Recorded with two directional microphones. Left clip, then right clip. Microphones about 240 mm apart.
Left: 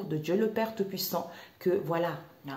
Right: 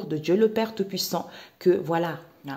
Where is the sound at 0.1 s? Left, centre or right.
Right.